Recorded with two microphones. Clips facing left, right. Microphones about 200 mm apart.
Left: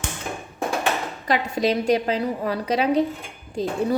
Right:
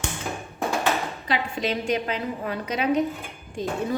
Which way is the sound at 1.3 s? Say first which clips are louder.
Left 5 dB; 40° left (ahead or behind).